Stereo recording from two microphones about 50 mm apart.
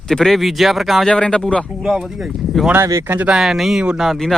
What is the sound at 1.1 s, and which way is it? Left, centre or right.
Speech, centre.